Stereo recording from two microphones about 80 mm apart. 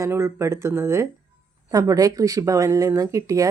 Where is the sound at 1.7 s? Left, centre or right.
Right.